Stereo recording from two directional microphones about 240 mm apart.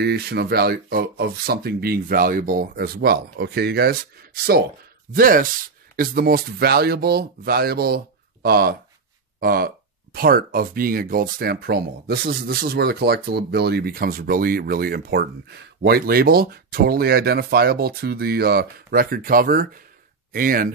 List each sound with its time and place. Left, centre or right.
0.0 s speech: right